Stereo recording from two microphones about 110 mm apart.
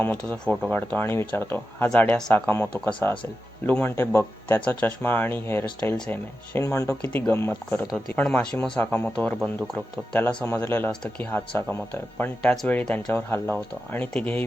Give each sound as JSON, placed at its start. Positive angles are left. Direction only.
{"t": 0.0, "sound": "speech", "side_deg": 15}
{"t": 1.9, "sound": "speech", "side_deg": 10}
{"t": 2.3, "sound": "speech", "side_deg": 20}
{"t": 7.0, "sound": "speech", "side_deg": 15}
{"t": 8.9, "sound": "speech", "side_deg": 20}
{"t": 9.1, "sound": "speech", "side_deg": 5}